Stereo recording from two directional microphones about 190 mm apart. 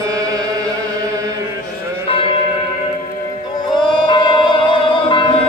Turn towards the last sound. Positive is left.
turn(degrees=25)  # may be behind; listen again after turning